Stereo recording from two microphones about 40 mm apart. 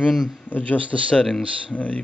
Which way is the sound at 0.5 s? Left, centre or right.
Left.